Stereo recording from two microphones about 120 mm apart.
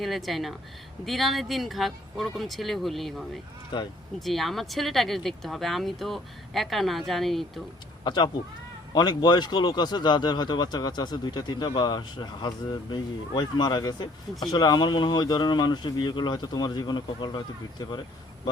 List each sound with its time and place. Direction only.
0.0 s speech: centre (ahead or behind)
3.7 s speech: 40° left (ahead or behind)
4.2 s speech: centre (ahead or behind)
8.0 s speech: 40° left (ahead or behind)